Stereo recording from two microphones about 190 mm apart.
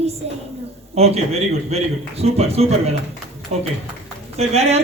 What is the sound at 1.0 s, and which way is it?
A woman's voice, 35° right (ahead or behind).